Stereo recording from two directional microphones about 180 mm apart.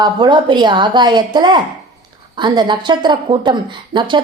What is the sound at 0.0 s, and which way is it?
A woman's voice, 25° right (ahead or behind).